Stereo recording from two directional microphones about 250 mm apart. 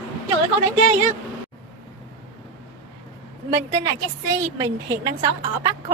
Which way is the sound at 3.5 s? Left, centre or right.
Centre.